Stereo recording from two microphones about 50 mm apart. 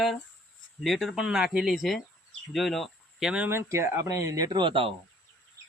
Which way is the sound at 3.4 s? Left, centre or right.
Right.